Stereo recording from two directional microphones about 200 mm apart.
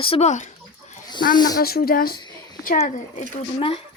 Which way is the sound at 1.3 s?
20° left (ahead or behind).